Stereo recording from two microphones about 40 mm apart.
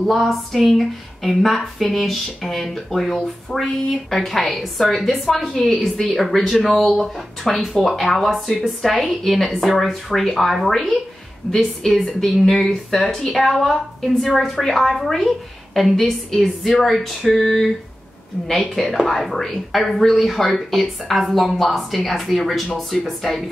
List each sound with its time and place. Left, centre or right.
0.0 s a woman's voice: centre
11.4 s a woman's voice: centre
11.8 s a woman's voice: centre